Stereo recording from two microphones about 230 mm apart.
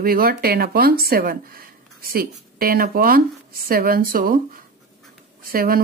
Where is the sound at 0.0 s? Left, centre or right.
Right.